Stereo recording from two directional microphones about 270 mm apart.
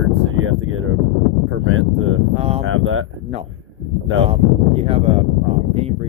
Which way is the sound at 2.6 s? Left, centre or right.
Right.